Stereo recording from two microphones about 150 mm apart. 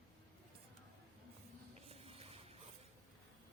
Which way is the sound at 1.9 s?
40° right (ahead or behind).